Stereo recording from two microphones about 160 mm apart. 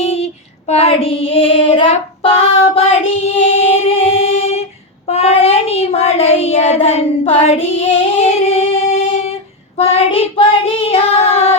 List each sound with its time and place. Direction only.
0.0 s child singing: 40° left (ahead or behind)